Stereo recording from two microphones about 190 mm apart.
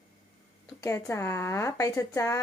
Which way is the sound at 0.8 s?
15° left (ahead or behind).